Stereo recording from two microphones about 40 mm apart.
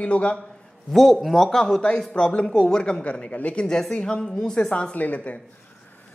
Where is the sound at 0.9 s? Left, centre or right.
Centre.